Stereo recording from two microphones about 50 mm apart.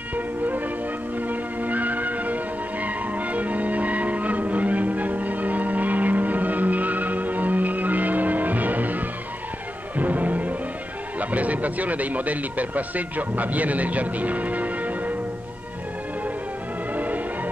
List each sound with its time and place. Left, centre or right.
0.1 s music: right
11.1 s speech: right
16.9 s music: right